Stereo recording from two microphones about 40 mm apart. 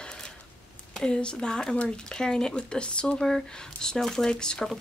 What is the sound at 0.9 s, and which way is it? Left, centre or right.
Speech, left.